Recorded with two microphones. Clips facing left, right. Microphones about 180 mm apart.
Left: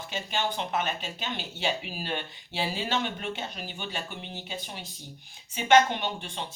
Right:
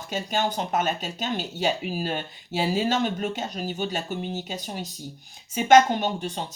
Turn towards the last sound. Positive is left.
turn(degrees=-40)  # may be behind; listen again after turning